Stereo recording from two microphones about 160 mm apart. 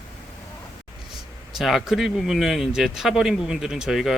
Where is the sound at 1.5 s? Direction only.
Centre (ahead or behind).